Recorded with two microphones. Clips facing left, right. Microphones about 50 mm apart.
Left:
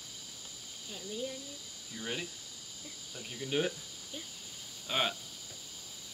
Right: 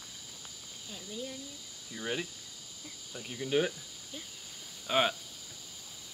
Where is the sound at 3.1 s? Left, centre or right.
Centre.